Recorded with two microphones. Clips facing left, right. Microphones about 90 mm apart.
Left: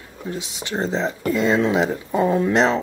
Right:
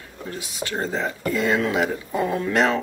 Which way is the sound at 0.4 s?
20° left (ahead or behind).